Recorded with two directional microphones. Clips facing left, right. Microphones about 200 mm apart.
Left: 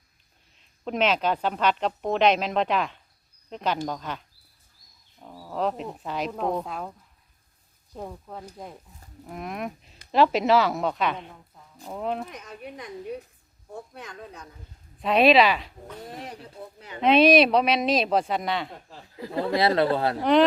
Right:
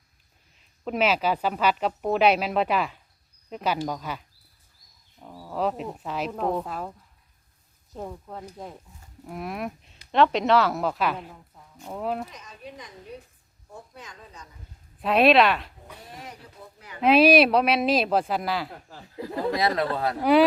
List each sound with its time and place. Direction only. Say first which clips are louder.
0.9 s speech: even; 5° right (ahead or behind)
7.9 s speech: right 1 dB; centre (ahead or behind)
12.3 s speech: left 3 dB; 60° left (ahead or behind)
13.9 s speech: left 5 dB; 60° left (ahead or behind)
15.0 s speech: even; centre (ahead or behind)
17.0 s speech: even; 5° right (ahead or behind)
19.5 s speech: left 3 dB; 30° left (ahead or behind)